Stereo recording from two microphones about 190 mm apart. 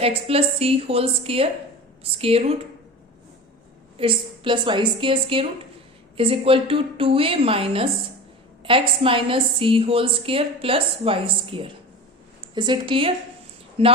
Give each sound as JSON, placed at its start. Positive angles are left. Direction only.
{"t": 0.0, "sound": "a woman's voice", "side_deg": -30}
{"t": 3.9, "sound": "a woman's voice", "side_deg": -25}